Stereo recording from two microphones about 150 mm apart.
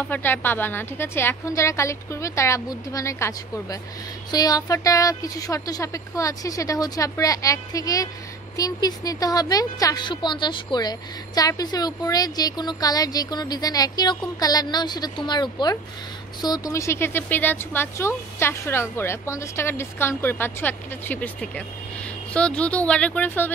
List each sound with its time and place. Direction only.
0.0 s a woman's voice: 10° left (ahead or behind)